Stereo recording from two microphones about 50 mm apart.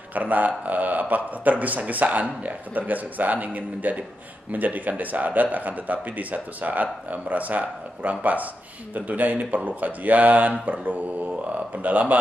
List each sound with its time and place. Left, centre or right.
0.1 s speech: right